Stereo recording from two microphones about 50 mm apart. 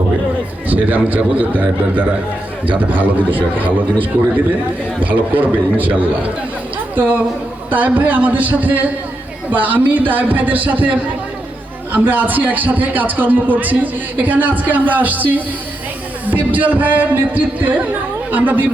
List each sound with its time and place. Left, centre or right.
0.7 s a man's voice: right
4.9 s a man's voice: right